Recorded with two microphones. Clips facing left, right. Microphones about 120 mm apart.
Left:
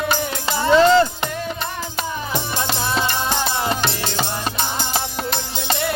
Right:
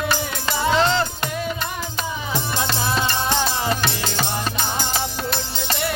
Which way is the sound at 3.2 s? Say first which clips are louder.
Even; 25° left (ahead or behind).